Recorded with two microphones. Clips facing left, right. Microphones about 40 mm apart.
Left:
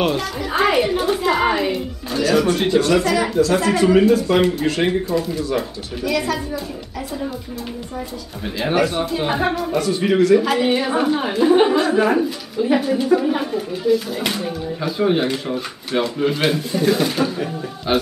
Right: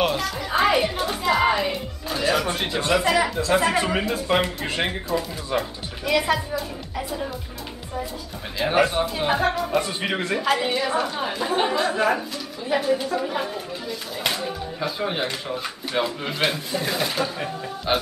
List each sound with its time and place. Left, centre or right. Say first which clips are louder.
0.0 s speech: left 3 dB; centre
2.8 s speech: left 3 dB; centre
4.4 s speech: left 7 dB; centre
8.7 s speech: left 1 dB; centre
9.8 s speech: left 7 dB; right
10.4 s speech: left 3 dB; centre
10.7 s a woman's voice: left 6 dB; centre